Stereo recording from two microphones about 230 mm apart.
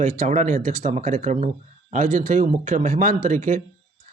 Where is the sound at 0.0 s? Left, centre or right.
Right.